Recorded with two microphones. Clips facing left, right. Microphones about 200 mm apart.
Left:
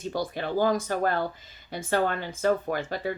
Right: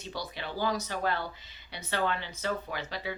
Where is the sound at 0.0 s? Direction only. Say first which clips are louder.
Left 8 dB; 50° left (ahead or behind).